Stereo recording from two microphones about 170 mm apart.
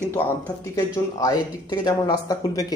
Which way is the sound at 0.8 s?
20° left (ahead or behind).